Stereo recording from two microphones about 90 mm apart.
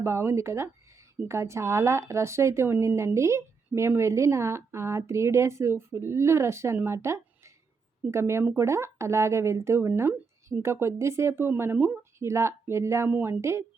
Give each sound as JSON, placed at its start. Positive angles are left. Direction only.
{"t": 0.0, "sound": "a woman's voice", "side_deg": -30}
{"t": 13.1, "sound": "a woman's voice", "side_deg": -20}
{"t": 13.4, "sound": "a woman's voice", "side_deg": -30}